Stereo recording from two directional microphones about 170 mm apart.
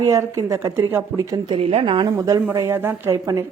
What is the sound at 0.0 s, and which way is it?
Speech, 20° right (ahead or behind).